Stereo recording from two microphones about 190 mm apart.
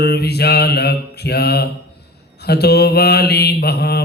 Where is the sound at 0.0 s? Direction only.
60° left (ahead or behind).